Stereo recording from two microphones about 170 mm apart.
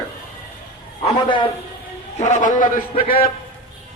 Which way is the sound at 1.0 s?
35° left (ahead or behind).